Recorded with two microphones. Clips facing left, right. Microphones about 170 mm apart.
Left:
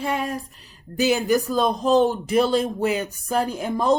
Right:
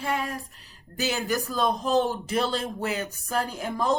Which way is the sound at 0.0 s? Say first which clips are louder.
Left 4 dB; 20° left (ahead or behind).